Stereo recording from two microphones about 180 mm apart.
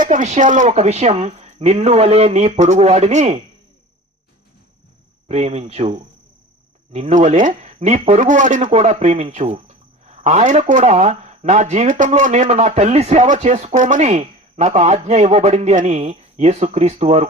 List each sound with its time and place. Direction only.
0.0 s speech: 45° right (ahead or behind)
5.3 s speech: 35° right (ahead or behind)
6.9 s speech: 40° right (ahead or behind)